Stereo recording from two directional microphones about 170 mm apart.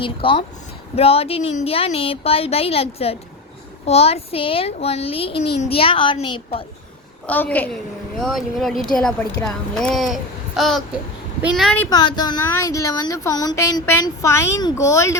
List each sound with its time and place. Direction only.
0.0 s speech: 30° left (ahead or behind)
7.3 s a woman's voice: 10° left (ahead or behind)
11.9 s speech: 25° left (ahead or behind)